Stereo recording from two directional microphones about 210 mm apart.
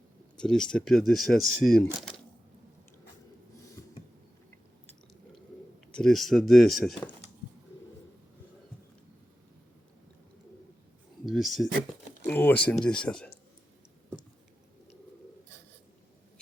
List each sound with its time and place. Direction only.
0.3 s speech: 5° left (ahead or behind)
5.9 s speech: centre (ahead or behind)
11.3 s speech: centre (ahead or behind)